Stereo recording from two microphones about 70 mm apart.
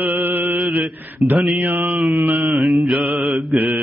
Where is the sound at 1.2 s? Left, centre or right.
Right.